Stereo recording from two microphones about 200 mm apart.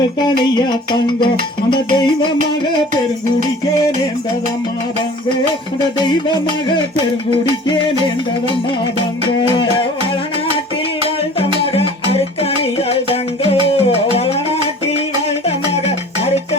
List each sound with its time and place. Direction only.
0.2 s music: 20° left (ahead or behind)
6.1 s music: 20° left (ahead or behind)
12.4 s music: 30° left (ahead or behind)